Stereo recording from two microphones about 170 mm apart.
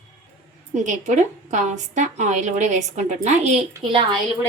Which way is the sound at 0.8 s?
45° right (ahead or behind).